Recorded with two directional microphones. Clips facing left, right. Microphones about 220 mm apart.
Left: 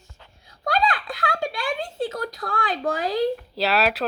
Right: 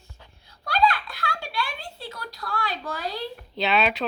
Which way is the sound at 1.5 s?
50° left (ahead or behind).